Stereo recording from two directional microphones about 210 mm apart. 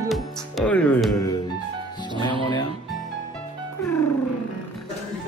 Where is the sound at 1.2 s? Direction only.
15° left (ahead or behind).